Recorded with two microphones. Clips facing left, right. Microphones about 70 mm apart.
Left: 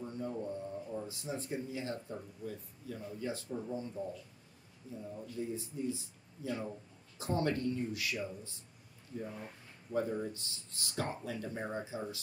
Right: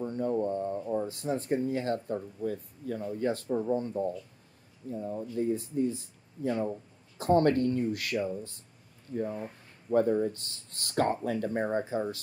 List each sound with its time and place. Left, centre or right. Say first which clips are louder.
0.0 s speech: right 10 dB; right